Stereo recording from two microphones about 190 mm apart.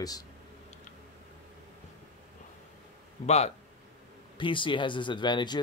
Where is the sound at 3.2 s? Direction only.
35° left (ahead or behind).